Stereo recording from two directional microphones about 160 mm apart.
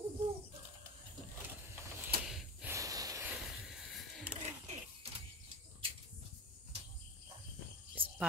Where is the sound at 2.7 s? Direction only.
20° right (ahead or behind).